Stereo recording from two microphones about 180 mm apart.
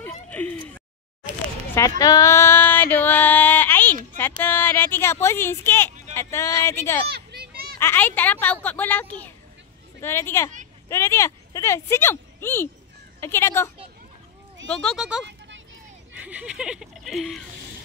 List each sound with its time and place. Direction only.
0.3 s a sound: 10° left (ahead or behind)
1.8 s female singing: 20° left (ahead or behind)
4.4 s speech: 10° left (ahead or behind)
7.1 s children playing: 65° right (ahead or behind)
7.8 s speech: 10° left (ahead or behind)
14.7 s speech: 5° left (ahead or behind)
15.2 s a sound: 80° right
16.2 s speech: 5° right (ahead or behind)